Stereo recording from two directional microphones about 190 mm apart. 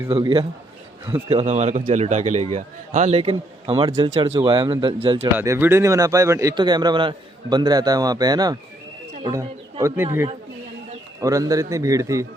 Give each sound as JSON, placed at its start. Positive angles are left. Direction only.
{"t": 0.1, "sound": "a man's voice", "side_deg": -25}
{"t": 5.1, "sound": "a man's voice", "side_deg": -15}